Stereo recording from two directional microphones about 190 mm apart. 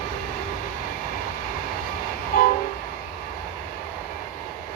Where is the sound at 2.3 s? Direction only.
50° left (ahead or behind).